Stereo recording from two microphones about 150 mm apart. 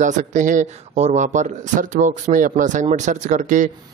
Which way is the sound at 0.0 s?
55° right (ahead or behind).